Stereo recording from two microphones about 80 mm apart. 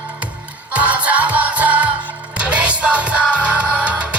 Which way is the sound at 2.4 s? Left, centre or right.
Centre.